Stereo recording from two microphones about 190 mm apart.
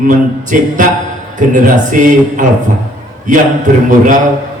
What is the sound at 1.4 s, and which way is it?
Speech, 40° right (ahead or behind).